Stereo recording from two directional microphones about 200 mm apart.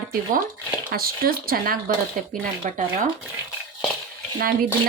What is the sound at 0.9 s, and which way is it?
Speech, 50° right (ahead or behind).